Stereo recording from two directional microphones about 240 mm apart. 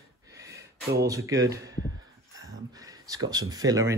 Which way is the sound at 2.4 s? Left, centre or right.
Centre.